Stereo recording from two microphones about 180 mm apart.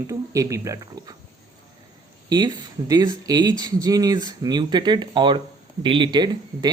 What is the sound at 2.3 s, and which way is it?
Speech, 20° right (ahead or behind).